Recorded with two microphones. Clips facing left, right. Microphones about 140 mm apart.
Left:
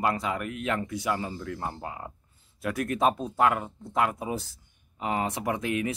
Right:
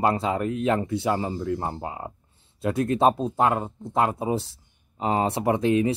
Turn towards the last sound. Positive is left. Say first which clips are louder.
# right 7 dB
turn(degrees=-30)  # may be behind; listen again after turning